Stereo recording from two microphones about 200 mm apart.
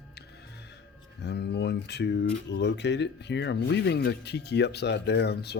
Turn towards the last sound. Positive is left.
turn(degrees=55)  # may be behind; listen again after turning